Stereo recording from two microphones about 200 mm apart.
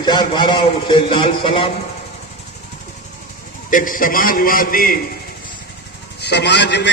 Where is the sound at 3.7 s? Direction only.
40° left (ahead or behind).